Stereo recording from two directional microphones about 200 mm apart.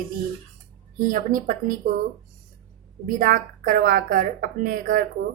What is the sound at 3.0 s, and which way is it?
A woman's voice, 45° right (ahead or behind).